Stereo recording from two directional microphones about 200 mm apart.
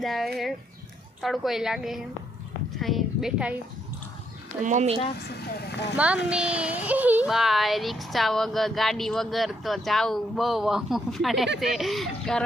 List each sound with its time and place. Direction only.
0.0 s a woman's voice: centre (ahead or behind)
4.6 s a woman's voice: 35° right (ahead or behind)
5.3 s speech: 50° left (ahead or behind)
6.3 s speech: 5° right (ahead or behind)